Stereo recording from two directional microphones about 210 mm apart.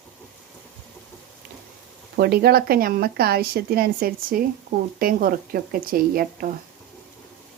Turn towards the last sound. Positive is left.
turn(degrees=-45)  # may be behind; listen again after turning